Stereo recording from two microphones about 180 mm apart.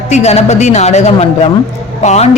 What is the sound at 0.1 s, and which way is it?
A woman's voice, 40° left (ahead or behind).